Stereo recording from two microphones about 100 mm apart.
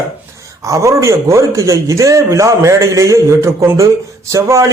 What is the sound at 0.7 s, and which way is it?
A man's voice, 30° right (ahead or behind).